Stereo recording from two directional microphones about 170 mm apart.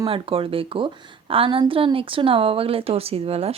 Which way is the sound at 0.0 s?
30° right (ahead or behind).